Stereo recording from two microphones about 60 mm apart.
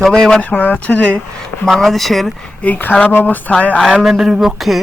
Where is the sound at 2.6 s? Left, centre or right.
Left.